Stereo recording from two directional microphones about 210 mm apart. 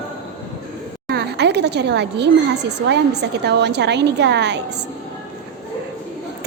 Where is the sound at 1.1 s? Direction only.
50° right (ahead or behind).